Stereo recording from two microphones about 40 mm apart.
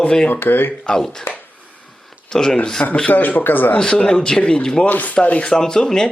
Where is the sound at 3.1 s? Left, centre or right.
Left.